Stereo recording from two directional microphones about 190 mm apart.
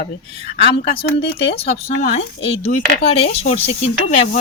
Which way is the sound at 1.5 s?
35° left (ahead or behind).